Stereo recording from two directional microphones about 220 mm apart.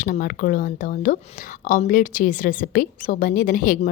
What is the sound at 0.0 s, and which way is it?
A woman's voice, 40° left (ahead or behind).